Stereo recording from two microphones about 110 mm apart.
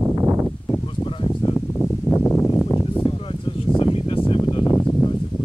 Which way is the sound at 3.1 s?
55° left (ahead or behind).